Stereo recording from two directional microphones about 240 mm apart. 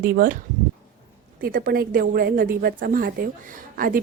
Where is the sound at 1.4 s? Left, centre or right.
Right.